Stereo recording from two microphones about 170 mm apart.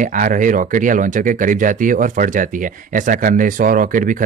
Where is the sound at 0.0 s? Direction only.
50° right (ahead or behind).